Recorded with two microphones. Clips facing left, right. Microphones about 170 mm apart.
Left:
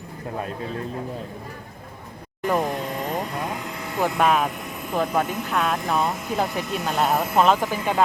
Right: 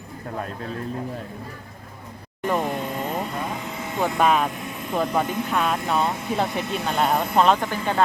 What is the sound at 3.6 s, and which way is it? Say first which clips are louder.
Speech: even; centre (ahead or behind).